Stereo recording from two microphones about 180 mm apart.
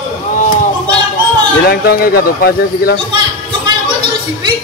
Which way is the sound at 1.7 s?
60° left (ahead or behind).